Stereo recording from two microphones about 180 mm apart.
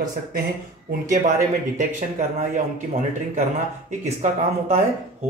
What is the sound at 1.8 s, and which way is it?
Speech, 45° right (ahead or behind).